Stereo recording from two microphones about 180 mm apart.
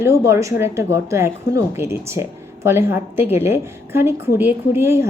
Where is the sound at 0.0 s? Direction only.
15° right (ahead or behind).